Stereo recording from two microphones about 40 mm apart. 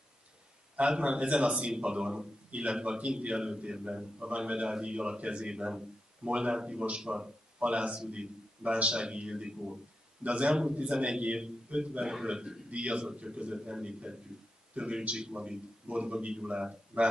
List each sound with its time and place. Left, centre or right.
0.7 s a man's voice: right